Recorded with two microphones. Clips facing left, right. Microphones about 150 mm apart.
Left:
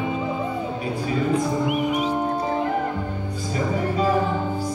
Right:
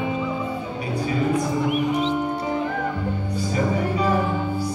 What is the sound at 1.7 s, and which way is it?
Music, 20° left (ahead or behind).